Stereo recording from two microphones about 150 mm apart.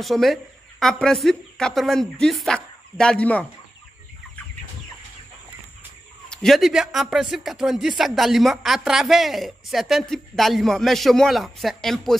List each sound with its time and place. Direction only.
0.0 s a woman's voice: centre (ahead or behind)
6.3 s a woman's voice: centre (ahead or behind)